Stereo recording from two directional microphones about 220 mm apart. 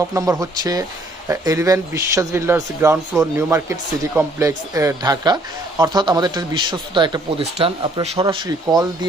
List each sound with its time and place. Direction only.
0.1 s a man's voice: 15° right (ahead or behind)